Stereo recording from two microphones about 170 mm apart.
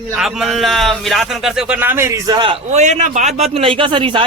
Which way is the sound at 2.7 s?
45° right (ahead or behind).